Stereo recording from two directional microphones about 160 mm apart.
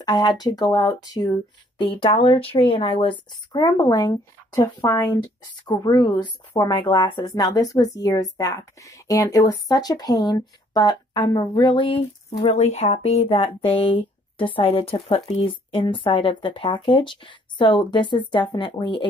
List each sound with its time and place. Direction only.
0.0 s a woman's voice: 25° left (ahead or behind)